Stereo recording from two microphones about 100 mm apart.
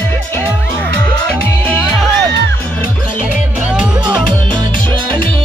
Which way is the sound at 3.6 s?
10° right (ahead or behind).